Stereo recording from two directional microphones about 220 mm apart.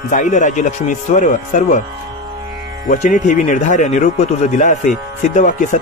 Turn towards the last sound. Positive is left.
turn(degrees=35)  # may be behind; listen again after turning